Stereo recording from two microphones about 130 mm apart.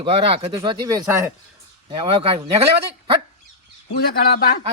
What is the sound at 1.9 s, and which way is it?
Speech, 40° right (ahead or behind).